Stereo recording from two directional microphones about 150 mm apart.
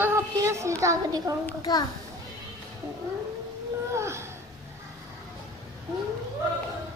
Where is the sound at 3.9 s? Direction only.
20° right (ahead or behind).